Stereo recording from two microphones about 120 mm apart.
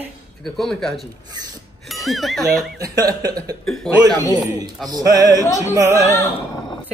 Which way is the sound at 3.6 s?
5° left (ahead or behind).